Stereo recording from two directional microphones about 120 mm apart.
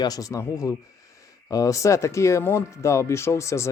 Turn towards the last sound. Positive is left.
turn(degrees=25)  # may be behind; listen again after turning